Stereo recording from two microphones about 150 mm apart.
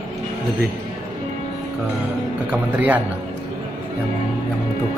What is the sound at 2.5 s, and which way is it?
Speech, 10° right (ahead or behind).